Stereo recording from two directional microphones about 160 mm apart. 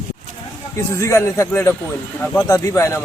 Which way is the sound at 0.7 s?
15° left (ahead or behind).